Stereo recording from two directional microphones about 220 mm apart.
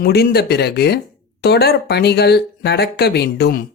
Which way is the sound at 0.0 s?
45° left (ahead or behind).